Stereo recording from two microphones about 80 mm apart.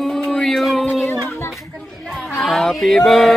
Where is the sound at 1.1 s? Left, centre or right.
Left.